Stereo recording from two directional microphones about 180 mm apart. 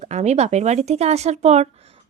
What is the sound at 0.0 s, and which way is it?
Speech, 40° right (ahead or behind).